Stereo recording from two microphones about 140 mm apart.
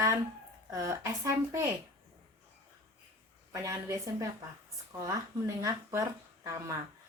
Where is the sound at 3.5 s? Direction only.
20° right (ahead or behind).